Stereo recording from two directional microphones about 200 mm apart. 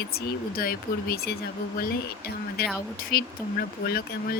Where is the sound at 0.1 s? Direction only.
50° left (ahead or behind).